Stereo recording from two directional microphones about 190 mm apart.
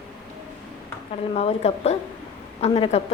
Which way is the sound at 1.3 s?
35° left (ahead or behind).